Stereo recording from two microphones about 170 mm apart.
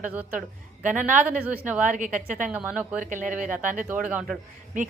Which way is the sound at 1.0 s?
45° right (ahead or behind).